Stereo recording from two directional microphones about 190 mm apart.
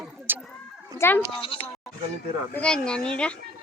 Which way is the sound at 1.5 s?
30° left (ahead or behind).